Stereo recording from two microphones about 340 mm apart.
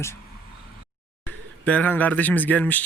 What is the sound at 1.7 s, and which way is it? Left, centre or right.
Speech, centre.